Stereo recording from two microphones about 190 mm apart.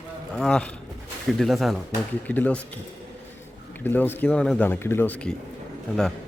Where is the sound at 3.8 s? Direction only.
10° left (ahead or behind).